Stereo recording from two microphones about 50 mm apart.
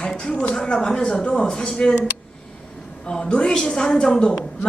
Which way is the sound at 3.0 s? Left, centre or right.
Centre.